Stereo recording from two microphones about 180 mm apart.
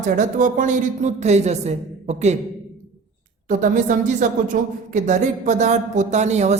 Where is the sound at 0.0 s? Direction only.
45° right (ahead or behind).